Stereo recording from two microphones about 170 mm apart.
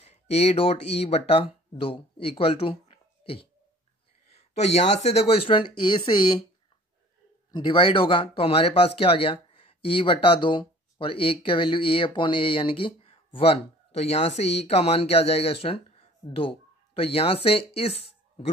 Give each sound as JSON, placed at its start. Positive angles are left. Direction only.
{"t": 0.0, "sound": "speech", "side_deg": 40}
{"t": 7.5, "sound": "speech", "side_deg": 30}